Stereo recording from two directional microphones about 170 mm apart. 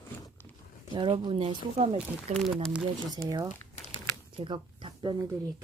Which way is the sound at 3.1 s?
20° right (ahead or behind).